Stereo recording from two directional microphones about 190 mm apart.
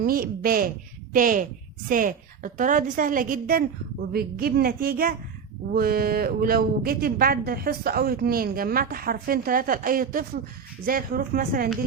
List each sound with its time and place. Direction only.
0.0 s speech: 50° right (ahead or behind)